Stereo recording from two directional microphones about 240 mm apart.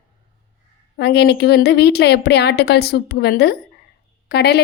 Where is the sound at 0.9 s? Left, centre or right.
Left.